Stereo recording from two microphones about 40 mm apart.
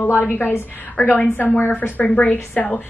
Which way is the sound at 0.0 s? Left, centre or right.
Left.